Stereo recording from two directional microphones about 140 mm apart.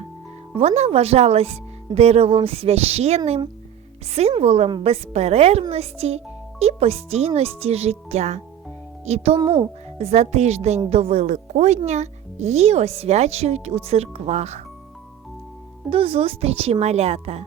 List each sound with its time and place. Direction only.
0.5 s a child's voice: 45° right (ahead or behind)
15.9 s a child's voice: 40° right (ahead or behind)